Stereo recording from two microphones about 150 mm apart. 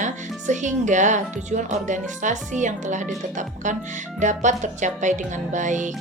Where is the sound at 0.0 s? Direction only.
55° right (ahead or behind).